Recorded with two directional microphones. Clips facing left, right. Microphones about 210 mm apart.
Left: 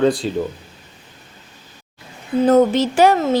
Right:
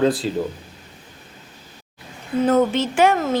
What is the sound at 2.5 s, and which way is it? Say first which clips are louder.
Speech: left 5 dB; 35° left (ahead or behind).